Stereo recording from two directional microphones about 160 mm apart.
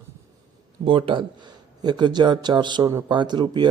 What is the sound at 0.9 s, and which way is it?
Speech, 35° right (ahead or behind).